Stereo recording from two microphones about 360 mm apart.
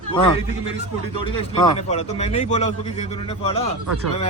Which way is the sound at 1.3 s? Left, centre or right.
Centre.